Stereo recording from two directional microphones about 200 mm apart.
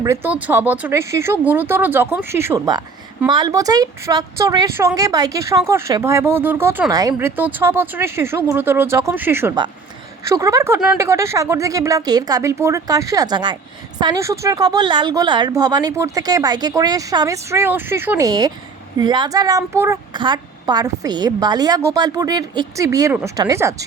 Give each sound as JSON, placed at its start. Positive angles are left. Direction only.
{"t": 0.0, "sound": "a woman's voice", "side_deg": -10}